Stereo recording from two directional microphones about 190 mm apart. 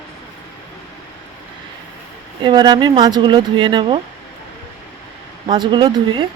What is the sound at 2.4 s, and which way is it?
Speech, 25° right (ahead or behind).